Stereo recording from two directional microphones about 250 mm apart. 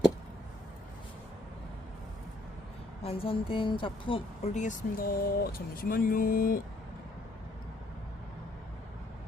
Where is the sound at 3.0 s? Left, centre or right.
Left.